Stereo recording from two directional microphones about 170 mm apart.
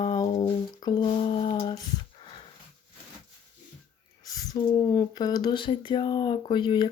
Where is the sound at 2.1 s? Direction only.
30° left (ahead or behind).